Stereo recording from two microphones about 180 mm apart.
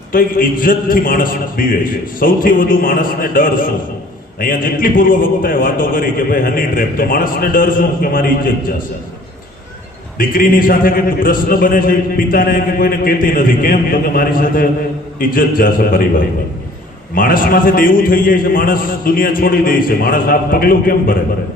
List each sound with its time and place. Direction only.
0.1 s a man's voice: 50° left (ahead or behind)
10.2 s a man's voice: 50° left (ahead or behind)